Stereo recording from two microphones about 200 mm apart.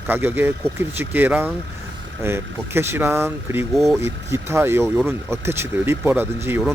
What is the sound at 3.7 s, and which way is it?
Speech, centre (ahead or behind).